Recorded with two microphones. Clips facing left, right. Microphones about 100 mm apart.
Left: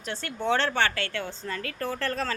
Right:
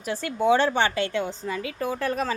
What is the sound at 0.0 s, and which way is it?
Speech, 10° right (ahead or behind).